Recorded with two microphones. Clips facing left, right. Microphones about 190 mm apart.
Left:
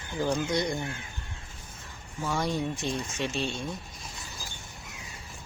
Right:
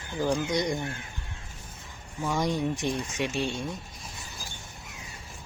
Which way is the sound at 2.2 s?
15° right (ahead or behind).